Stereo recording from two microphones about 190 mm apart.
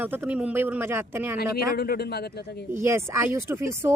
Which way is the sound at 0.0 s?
10° right (ahead or behind).